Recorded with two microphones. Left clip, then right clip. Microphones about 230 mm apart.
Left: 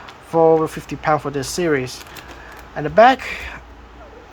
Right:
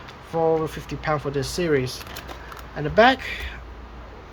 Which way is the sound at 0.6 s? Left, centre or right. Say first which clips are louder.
Left 7 dB; left.